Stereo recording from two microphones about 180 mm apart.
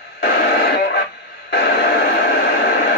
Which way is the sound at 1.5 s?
65° left (ahead or behind).